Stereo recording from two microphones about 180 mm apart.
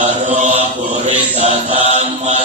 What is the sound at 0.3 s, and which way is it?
Chant, 40° right (ahead or behind).